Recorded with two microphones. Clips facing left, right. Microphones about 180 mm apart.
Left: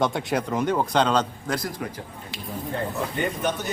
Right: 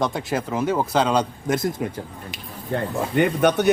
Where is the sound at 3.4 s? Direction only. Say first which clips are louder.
Right 10 dB; 75° right (ahead or behind).